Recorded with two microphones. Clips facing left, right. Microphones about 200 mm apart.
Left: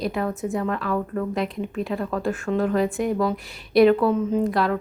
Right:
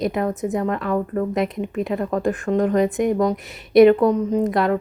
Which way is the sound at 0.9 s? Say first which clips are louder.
Right 3 dB; 20° right (ahead or behind).